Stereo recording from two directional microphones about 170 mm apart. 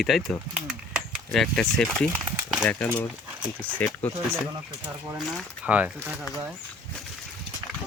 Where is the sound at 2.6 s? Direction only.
5° left (ahead or behind).